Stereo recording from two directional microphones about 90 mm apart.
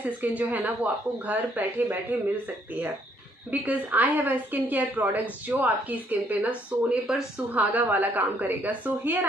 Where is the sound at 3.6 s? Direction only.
20° right (ahead or behind).